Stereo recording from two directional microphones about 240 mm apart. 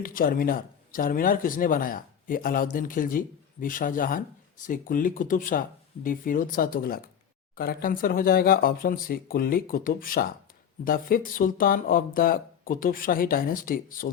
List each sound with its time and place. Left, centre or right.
0.0 s speech: left